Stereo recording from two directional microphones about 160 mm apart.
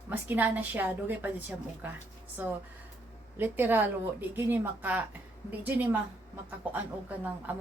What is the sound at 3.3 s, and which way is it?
A woman's voice, 10° right (ahead or behind).